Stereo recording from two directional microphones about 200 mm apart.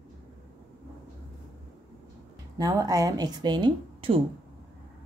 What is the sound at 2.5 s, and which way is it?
Speech, 20° right (ahead or behind).